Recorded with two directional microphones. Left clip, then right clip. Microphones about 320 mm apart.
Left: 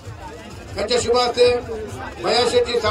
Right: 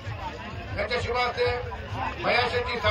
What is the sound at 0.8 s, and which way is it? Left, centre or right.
Speech, left.